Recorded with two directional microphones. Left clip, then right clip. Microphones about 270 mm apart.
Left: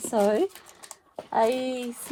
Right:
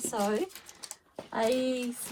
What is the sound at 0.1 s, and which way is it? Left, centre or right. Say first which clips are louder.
Speech: left 8 dB; left.